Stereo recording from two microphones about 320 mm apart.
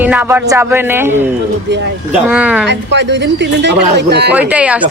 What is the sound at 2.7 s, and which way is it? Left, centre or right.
A man's voice, right.